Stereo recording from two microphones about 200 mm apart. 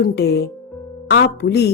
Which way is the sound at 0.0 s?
55° left (ahead or behind).